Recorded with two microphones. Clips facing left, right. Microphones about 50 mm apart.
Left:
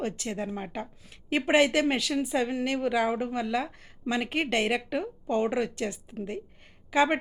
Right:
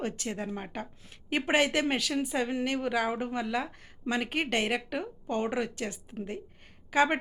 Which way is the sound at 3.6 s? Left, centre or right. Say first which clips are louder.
Left 2 dB; centre.